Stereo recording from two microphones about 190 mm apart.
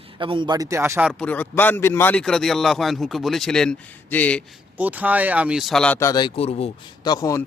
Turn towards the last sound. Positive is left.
turn(degrees=20)  # may be behind; listen again after turning